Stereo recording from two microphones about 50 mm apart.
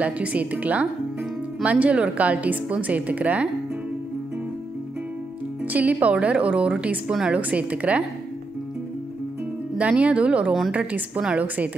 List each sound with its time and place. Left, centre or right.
0.0 s a woman's voice: right
5.7 s a woman's voice: right
9.8 s a woman's voice: right